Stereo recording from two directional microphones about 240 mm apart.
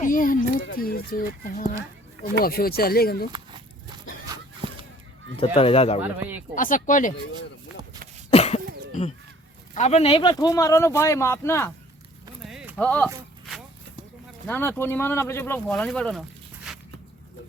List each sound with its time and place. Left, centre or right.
0.0 s speech: left
4.3 s a sound: right
5.4 s speech: left
6.0 s speech: centre
6.6 s speech: left
8.3 s cough: left
8.6 s cough: right
9.7 s speech: left; by 11.7 s centre
12.5 s a sound: centre
14.4 s speech: centre